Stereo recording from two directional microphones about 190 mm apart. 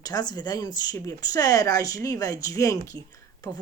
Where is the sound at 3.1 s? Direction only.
20° left (ahead or behind).